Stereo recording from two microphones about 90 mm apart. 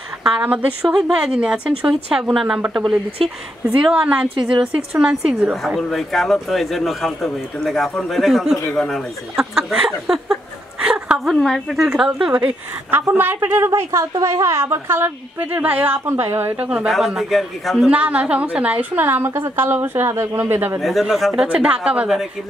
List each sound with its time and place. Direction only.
0.2 s a woman's voice: 15° right (ahead or behind)
0.8 s a woman's voice: 5° right (ahead or behind)
3.8 s a woman's voice: 10° right (ahead or behind)
9.4 s a man's voice: 5° right (ahead or behind)
12.4 s a woman's voice: 25° right (ahead or behind)
13.7 s a woman's voice: 30° right (ahead or behind)
16.6 s a woman's voice: 10° right (ahead or behind)
17.8 s a woman's voice: 15° right (ahead or behind)
20.8 s a man's voice: centre (ahead or behind)
21.4 s a woman's voice: 15° right (ahead or behind)